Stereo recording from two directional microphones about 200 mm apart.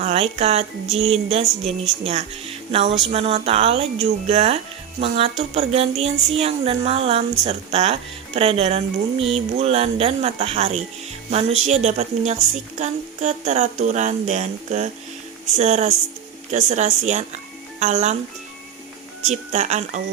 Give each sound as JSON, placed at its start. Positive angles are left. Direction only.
{"t": 0.0, "sound": "speech", "side_deg": -30}
{"t": 19.3, "sound": "speech", "side_deg": -35}